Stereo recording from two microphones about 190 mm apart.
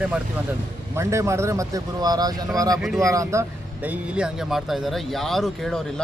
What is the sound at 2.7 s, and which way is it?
Speech, centre (ahead or behind).